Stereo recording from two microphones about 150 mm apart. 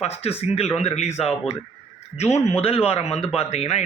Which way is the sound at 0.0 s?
45° left (ahead or behind).